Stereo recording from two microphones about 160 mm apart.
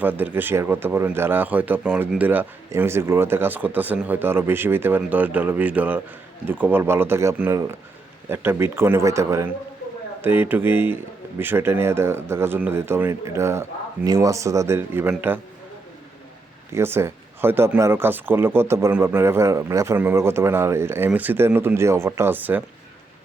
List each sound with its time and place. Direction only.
0.0 s a man's voice: 10° right (ahead or behind)
16.7 s a man's voice: 15° right (ahead or behind)